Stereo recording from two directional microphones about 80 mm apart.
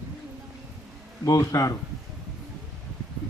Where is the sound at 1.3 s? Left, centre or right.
Left.